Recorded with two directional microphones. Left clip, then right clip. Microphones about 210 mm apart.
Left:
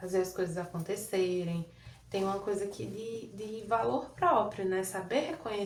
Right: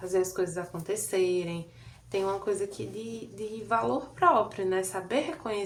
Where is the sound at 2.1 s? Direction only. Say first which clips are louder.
Right 3 dB; 35° right (ahead or behind).